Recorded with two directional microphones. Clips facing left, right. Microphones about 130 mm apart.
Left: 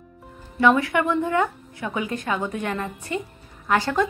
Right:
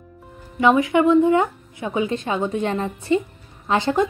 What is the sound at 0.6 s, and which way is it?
A woman's voice, 20° right (ahead or behind).